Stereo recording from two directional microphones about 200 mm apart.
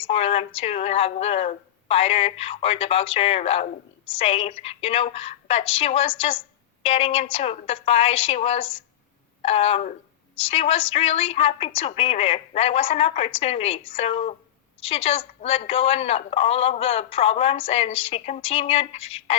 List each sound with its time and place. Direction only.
0.0 s speech: 30° left (ahead or behind)